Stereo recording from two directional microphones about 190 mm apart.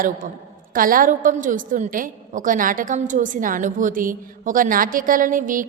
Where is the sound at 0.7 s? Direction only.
45° right (ahead or behind).